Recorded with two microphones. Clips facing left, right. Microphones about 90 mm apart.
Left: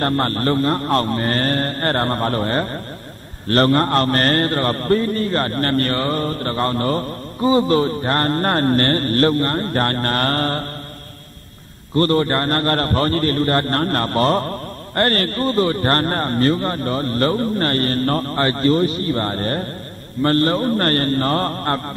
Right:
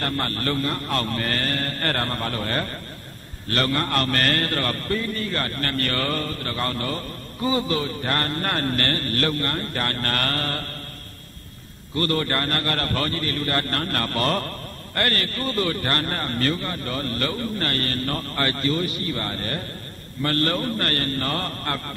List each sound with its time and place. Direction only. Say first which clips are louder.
0.0 s a man's voice: left 7 dB; 35° left (ahead or behind)
11.9 s a man's voice: left 7 dB; 35° left (ahead or behind)